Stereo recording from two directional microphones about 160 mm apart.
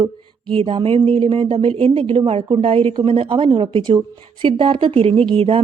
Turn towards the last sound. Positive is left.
turn(degrees=-35)  # may be behind; listen again after turning